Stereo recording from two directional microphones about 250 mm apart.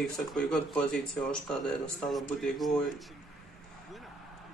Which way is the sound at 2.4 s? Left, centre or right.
Centre.